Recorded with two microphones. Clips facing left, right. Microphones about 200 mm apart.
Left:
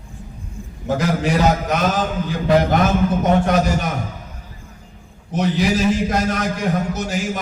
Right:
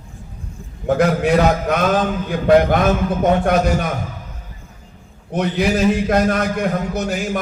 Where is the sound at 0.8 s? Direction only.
60° right (ahead or behind).